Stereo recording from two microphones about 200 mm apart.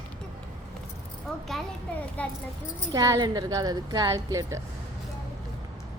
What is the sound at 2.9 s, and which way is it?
A woman's voice, 15° right (ahead or behind).